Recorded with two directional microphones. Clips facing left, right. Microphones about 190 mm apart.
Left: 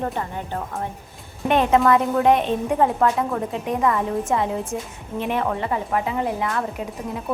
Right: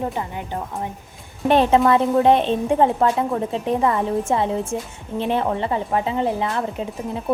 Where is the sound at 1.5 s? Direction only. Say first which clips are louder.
Right 2 dB; 30° right (ahead or behind).